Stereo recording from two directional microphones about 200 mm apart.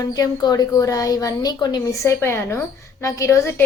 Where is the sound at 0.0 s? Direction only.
20° left (ahead or behind).